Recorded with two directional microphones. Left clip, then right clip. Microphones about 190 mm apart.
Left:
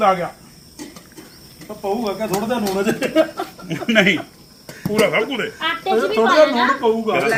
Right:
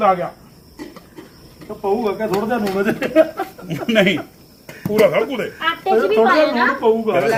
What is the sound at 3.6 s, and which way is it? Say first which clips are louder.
Speech: left 1 dB; 65° right (ahead or behind).